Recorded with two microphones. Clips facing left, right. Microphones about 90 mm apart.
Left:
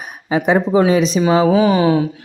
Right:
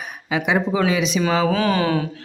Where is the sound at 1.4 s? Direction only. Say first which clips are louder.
Left 6 dB; 10° left (ahead or behind).